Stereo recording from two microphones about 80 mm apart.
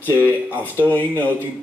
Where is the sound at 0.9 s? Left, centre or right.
Left.